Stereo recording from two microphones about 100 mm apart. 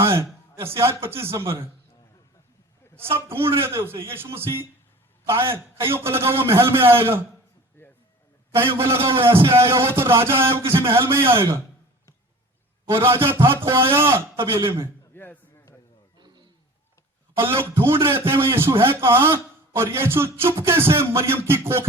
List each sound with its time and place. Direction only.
0.0 s a man's voice: 25° right (ahead or behind)
3.0 s a man's voice: 25° right (ahead or behind)
7.8 s a sound: 20° left (ahead or behind)
8.5 s a man's voice: 25° right (ahead or behind)
12.9 s a man's voice: 25° right (ahead or behind)
15.1 s a sound: 20° left (ahead or behind)
16.1 s roaring cats: 45° right (ahead or behind)
17.3 s a man's voice: 25° right (ahead or behind)